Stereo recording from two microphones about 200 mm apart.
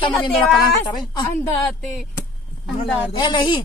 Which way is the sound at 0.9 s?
20° left (ahead or behind).